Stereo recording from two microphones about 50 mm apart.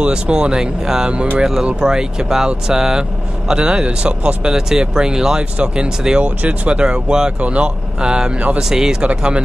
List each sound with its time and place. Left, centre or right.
0.0 s speech: centre
4.5 s speech: centre